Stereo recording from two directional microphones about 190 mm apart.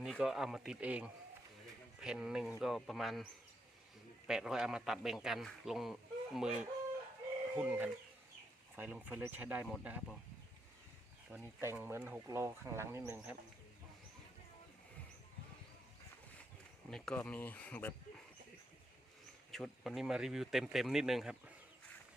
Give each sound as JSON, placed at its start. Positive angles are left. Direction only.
{"t": 0.0, "sound": "a man's voice", "side_deg": 0}
{"t": 4.3, "sound": "a man's voice", "side_deg": -5}
{"t": 11.3, "sound": "speech", "side_deg": -10}
{"t": 16.9, "sound": "speech", "side_deg": 5}
{"t": 19.5, "sound": "a man's voice", "side_deg": 0}